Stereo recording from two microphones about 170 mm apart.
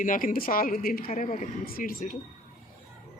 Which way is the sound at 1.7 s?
55° left (ahead or behind).